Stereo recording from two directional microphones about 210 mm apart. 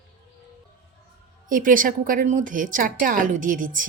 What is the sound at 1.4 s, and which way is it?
A woman's voice, 40° right (ahead or behind).